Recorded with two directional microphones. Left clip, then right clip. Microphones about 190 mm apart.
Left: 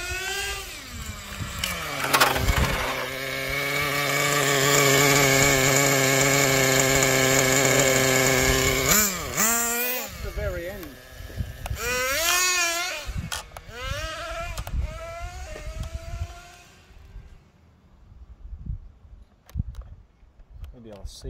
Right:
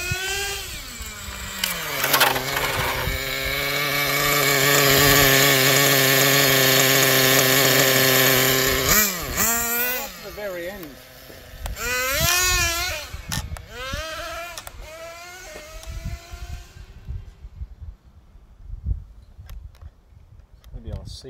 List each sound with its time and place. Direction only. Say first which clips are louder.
0.0 s vehicle: right 3 dB; 10° right (ahead or behind)
2.0 s a sound: right 1 dB; 35° right (ahead or behind)
2.3 s wood: right 2 dB; centre (ahead or behind)
9.0 s vehicle: right 1 dB; 5° right (ahead or behind)
10.8 s baby cry: right 1 dB; 10° left (ahead or behind)
20.8 s a sound: right 2 dB; 15° left (ahead or behind)